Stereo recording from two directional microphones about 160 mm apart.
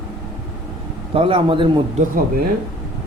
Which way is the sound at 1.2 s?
35° right (ahead or behind).